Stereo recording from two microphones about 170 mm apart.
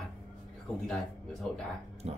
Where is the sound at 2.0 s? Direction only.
40° right (ahead or behind).